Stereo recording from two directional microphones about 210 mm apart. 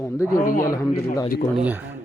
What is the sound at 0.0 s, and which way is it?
Mantra, 10° left (ahead or behind).